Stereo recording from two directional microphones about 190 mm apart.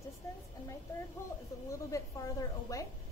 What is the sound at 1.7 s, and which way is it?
A woman's voice, 15° left (ahead or behind).